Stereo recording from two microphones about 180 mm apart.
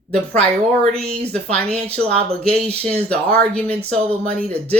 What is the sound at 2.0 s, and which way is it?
Speech, 35° right (ahead or behind).